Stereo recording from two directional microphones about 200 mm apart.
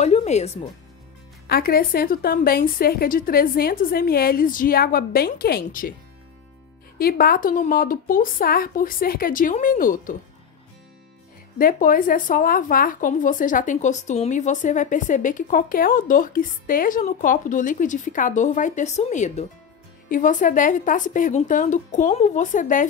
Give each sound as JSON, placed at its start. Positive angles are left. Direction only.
{"t": 0.0, "sound": "speech", "side_deg": 35}
{"t": 1.5, "sound": "a woman's voice", "side_deg": 50}
{"t": 7.0, "sound": "a woman's voice", "side_deg": 50}
{"t": 11.5, "sound": "speech", "side_deg": 45}